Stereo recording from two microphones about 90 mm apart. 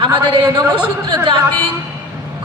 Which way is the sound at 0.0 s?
60° right (ahead or behind).